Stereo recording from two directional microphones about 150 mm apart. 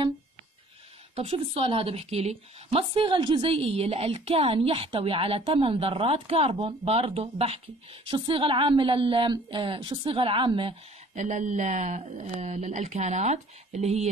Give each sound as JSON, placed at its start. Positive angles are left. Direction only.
{"t": 1.1, "sound": "a woman's voice", "side_deg": -40}
{"t": 11.1, "sound": "speech", "side_deg": -55}